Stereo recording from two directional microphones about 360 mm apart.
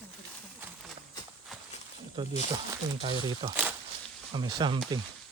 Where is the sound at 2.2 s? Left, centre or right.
Centre.